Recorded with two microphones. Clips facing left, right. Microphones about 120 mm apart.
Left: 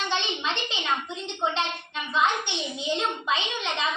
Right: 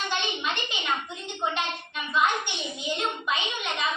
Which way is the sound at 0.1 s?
20° left (ahead or behind).